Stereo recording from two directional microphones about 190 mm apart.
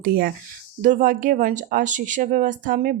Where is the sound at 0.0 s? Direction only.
50° right (ahead or behind).